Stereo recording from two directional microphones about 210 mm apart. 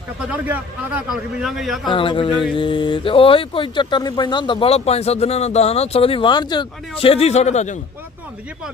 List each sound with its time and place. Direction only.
0.2 s a man's voice: 5° right (ahead or behind)
1.9 s speech: 25° left (ahead or behind)